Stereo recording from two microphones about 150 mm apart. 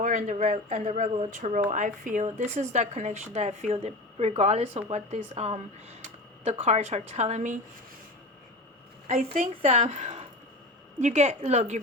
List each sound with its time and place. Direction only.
0.0 s a woman's voice: 55° right (ahead or behind)
9.0 s a woman's voice: 50° right (ahead or behind)